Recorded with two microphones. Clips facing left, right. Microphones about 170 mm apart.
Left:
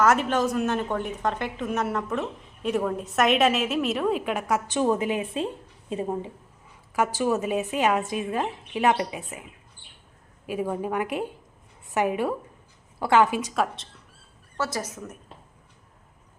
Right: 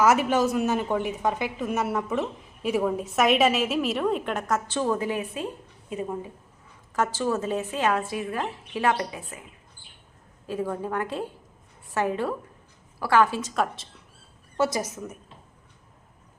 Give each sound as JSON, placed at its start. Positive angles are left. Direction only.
{"t": 0.0, "sound": "a woman's voice", "side_deg": -10}
{"t": 6.9, "sound": "a woman's voice", "side_deg": 15}
{"t": 10.4, "sound": "a woman's voice", "side_deg": 15}
{"t": 13.5, "sound": "a woman's voice", "side_deg": 0}
{"t": 14.6, "sound": "a woman's voice", "side_deg": -15}